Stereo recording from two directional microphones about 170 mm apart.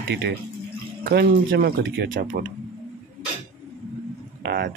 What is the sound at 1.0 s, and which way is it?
Speech, 70° right (ahead or behind).